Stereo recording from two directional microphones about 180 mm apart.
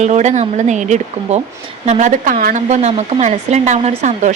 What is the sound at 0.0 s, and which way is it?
A woman's voice, 40° right (ahead or behind).